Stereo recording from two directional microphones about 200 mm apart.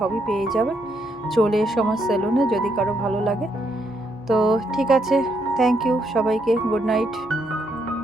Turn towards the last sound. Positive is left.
turn(degrees=0)  # may be behind; listen again after turning